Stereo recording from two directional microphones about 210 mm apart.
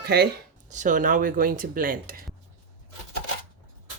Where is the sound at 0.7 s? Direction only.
35° right (ahead or behind).